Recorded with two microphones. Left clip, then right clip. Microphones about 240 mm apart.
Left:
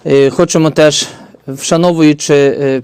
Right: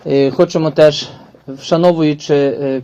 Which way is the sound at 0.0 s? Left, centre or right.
Left.